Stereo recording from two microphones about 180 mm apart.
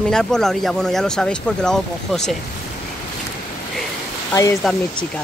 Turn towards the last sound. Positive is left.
turn(degrees=0)  # may be behind; listen again after turning